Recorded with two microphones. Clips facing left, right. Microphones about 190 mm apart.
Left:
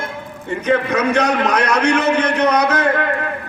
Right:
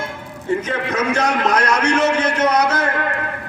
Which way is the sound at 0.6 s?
60° left (ahead or behind).